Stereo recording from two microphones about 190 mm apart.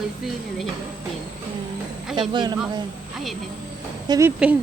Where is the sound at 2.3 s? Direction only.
25° right (ahead or behind).